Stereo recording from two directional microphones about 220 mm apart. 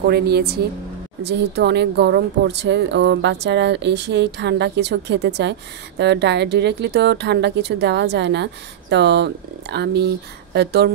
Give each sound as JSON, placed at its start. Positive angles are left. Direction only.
{"t": 0.0, "sound": "a woman's voice", "side_deg": -45}